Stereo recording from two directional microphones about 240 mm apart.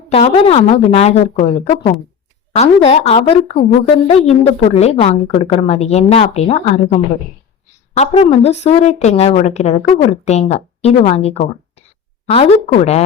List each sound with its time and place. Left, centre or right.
0.1 s a woman's voice: left